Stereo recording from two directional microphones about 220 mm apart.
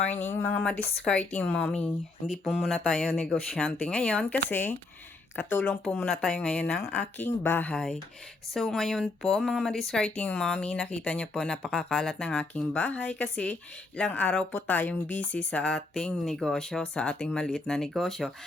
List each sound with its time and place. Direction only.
0.1 s speech: 30° left (ahead or behind)
0.4 s speech: 5° left (ahead or behind)